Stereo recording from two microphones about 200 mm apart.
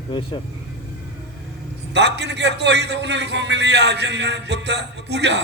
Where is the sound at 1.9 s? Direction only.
60° right (ahead or behind).